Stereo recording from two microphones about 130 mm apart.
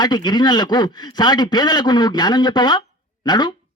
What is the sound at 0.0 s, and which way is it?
Speech, 35° left (ahead or behind).